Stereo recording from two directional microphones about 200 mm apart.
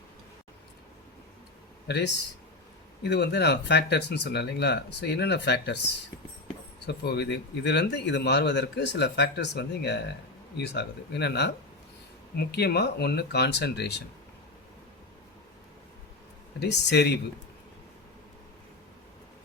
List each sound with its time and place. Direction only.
3.0 s speech: 55° left (ahead or behind)
6.8 s speech: 55° left (ahead or behind)
16.6 s speech: 55° left (ahead or behind)